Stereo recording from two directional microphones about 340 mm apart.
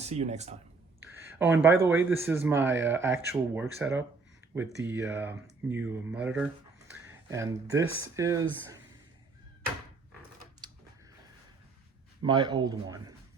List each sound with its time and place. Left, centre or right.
0.0 s speech: centre
1.0 s a man's voice: centre
10.6 s a sound: centre
12.2 s speech: centre